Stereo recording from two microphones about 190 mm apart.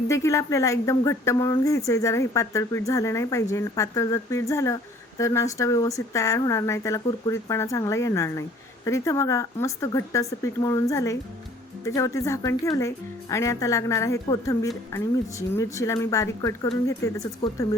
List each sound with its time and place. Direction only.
0.1 s speech: 15° left (ahead or behind)